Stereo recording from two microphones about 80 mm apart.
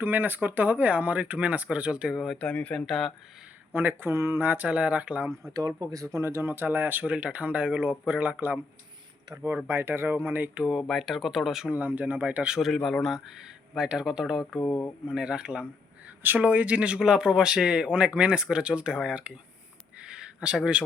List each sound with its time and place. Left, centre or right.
0.0 s speech: right
2.1 s speech: centre
2.4 s speech: centre
2.8 s speech: centre
3.8 s speech: right
5.9 s speech: right; by 8.4 s centre
9.6 s speech: right
10.7 s speech: centre
11.7 s speech: centre
12.5 s speech: centre
16.2 s speech: right
20.0 s a sound: centre